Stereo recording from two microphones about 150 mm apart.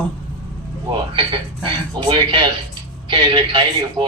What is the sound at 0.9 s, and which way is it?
A man's voice, 30° right (ahead or behind).